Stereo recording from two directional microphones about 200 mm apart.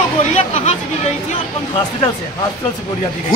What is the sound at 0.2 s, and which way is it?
Chatter, 35° left (ahead or behind).